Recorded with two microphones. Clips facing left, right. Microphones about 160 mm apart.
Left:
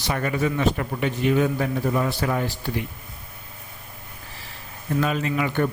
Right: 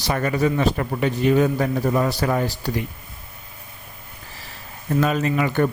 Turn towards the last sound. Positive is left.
turn(degrees=-45)  # may be behind; listen again after turning